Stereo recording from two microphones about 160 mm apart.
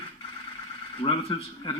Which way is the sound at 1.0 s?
35° left (ahead or behind).